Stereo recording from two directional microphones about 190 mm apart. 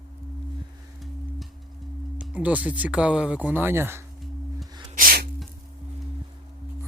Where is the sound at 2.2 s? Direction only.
5° right (ahead or behind).